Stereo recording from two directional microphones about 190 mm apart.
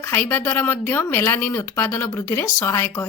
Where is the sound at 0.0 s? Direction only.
10° left (ahead or behind).